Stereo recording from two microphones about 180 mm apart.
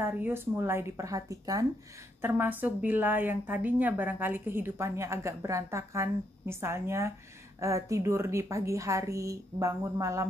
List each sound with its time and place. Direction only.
0.0 s a woman's voice: 10° right (ahead or behind)